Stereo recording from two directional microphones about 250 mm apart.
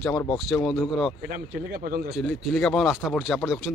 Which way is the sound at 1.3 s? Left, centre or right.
Right.